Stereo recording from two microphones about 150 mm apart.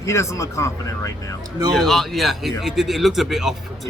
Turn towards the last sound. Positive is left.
turn(degrees=0)  # may be behind; listen again after turning